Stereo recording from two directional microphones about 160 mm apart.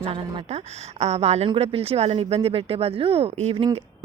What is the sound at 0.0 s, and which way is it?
A woman's voice, 35° right (ahead or behind).